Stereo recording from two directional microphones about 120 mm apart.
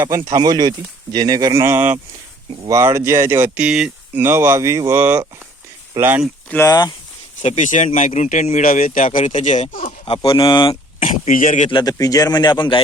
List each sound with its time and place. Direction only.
0.0 s speech: 25° right (ahead or behind); by 4.2 s 5° right (ahead or behind)
4.2 s speech: 20° right (ahead or behind)
6.7 s a man's voice: 35° left (ahead or behind)
7.4 s speech: 80° left
7.9 s speech: 80° left
10.2 s speech: 45° left (ahead or behind)
11.0 s speech: 90° left
11.7 s a man's voice: 35° left (ahead or behind)